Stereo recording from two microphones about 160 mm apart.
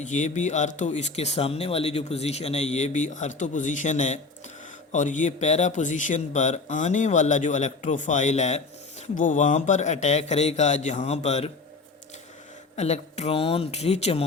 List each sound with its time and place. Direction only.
0.0 s speech: 50° left (ahead or behind)
12.7 s speech: 45° left (ahead or behind)